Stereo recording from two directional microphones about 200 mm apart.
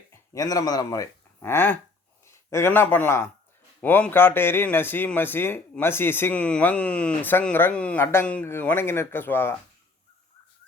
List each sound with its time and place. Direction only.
0.1 s a man's voice: 15° left (ahead or behind)